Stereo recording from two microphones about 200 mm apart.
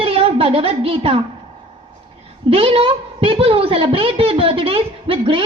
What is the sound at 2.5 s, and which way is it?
A woman's voice, 30° right (ahead or behind).